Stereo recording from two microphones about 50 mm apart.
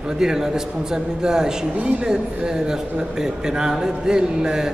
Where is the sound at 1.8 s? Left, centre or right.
Right.